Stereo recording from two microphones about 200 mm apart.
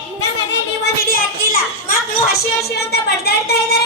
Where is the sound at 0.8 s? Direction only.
45° left (ahead or behind).